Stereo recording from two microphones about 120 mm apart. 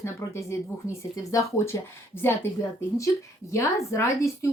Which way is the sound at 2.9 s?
25° left (ahead or behind).